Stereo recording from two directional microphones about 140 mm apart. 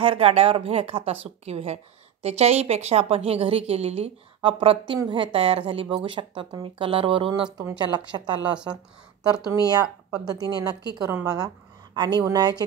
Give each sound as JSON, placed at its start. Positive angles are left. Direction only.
{"t": 0.0, "sound": "a woman's voice", "side_deg": -45}